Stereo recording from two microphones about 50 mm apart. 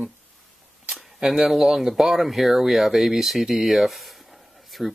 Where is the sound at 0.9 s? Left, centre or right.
Centre.